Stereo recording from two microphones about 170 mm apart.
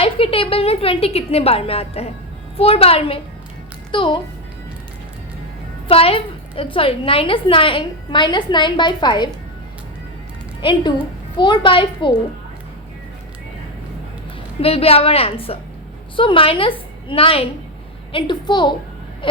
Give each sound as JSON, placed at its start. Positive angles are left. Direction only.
{"t": 0.0, "sound": "a woman's voice", "side_deg": 30}
{"t": 5.9, "sound": "a woman's voice", "side_deg": 35}
{"t": 10.6, "sound": "a woman's voice", "side_deg": 30}
{"t": 14.6, "sound": "a woman's voice", "side_deg": 35}